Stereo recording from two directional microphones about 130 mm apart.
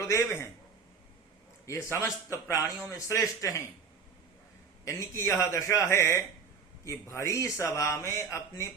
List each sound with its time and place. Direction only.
0.0 s a man's voice: 20° left (ahead or behind)
1.6 s a man's voice: 20° left (ahead or behind)
4.9 s a man's voice: 20° left (ahead or behind)